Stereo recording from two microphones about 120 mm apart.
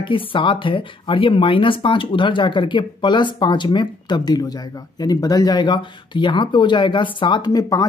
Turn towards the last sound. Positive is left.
turn(degrees=30)  # may be behind; listen again after turning